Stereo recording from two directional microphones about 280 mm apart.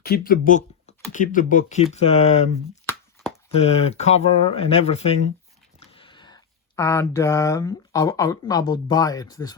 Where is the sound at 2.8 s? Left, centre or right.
Centre.